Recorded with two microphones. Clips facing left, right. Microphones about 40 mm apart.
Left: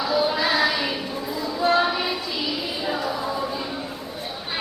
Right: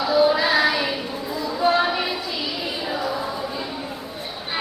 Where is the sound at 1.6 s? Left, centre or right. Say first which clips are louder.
Right 1 dB; centre.